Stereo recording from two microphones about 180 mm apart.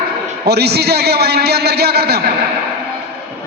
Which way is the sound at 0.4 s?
65° right (ahead or behind).